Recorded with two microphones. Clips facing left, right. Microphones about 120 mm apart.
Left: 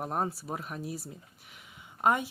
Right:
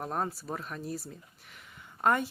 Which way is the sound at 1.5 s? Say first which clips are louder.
Even; 10° left (ahead or behind).